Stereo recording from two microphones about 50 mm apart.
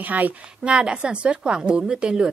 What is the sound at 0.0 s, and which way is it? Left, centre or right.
Speech, right.